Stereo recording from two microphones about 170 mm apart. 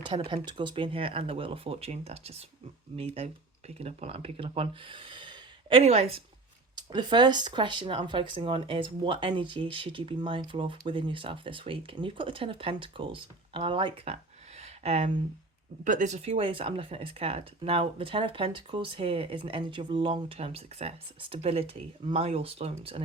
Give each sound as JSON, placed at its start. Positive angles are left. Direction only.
{"t": 0.0, "sound": "speech", "side_deg": -30}
{"t": 6.7, "sound": "speech", "side_deg": -25}
{"t": 15.8, "sound": "speech", "side_deg": -50}